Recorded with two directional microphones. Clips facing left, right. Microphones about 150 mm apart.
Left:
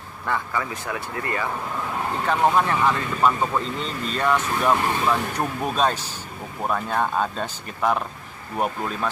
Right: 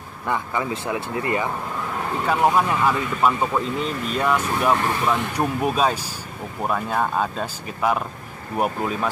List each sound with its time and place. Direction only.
0.3 s speech: 20° right (ahead or behind)
2.2 s speech: 10° right (ahead or behind)